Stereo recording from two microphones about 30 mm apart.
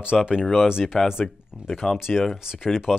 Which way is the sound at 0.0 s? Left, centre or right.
Right.